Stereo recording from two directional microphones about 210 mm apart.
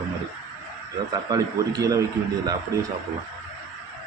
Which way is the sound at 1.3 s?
15° right (ahead or behind).